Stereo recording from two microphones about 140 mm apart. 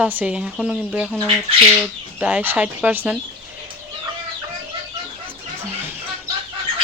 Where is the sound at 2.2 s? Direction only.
10° right (ahead or behind).